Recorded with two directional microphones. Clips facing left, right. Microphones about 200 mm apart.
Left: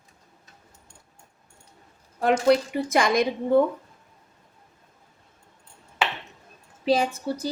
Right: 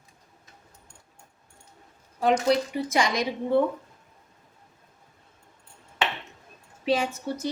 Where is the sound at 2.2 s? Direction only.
55° left (ahead or behind).